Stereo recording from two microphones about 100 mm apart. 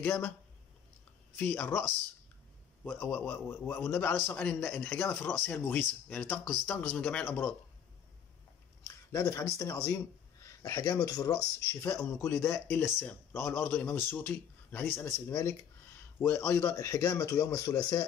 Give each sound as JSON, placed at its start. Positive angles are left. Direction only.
{"t": 1.4, "sound": "a man's voice", "side_deg": 15}
{"t": 2.8, "sound": "a man's voice", "side_deg": 20}
{"t": 8.8, "sound": "speech", "side_deg": 30}
{"t": 11.0, "sound": "speech", "side_deg": 40}
{"t": 15.0, "sound": "speech", "side_deg": 25}